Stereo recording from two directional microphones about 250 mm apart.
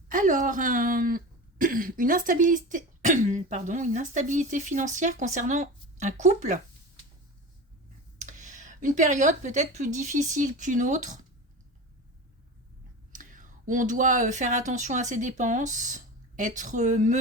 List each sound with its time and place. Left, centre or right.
0.1 s speech: right
8.2 s speech: right
13.1 s speech: right